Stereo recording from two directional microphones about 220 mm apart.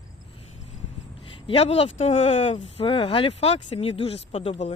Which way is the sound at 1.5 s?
25° left (ahead or behind).